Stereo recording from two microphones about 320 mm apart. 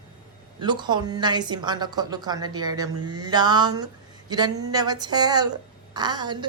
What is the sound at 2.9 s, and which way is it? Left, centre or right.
Mantra, right.